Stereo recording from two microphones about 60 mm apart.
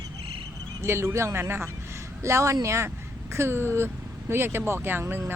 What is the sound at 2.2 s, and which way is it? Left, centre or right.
A woman's voice, right.